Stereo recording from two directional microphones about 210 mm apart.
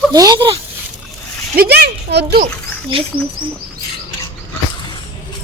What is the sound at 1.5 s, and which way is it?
Speech, 45° right (ahead or behind).